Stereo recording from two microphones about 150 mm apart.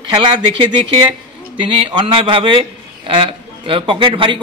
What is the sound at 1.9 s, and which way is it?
Speech, 35° right (ahead or behind).